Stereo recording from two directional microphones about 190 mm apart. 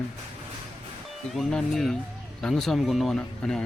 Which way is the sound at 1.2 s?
Centre (ahead or behind).